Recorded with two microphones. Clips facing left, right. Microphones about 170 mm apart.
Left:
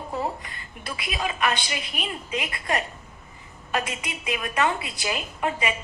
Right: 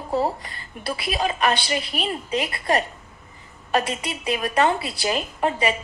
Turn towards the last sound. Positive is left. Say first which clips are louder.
# right 4 dB
turn(degrees=-35)  # may be behind; listen again after turning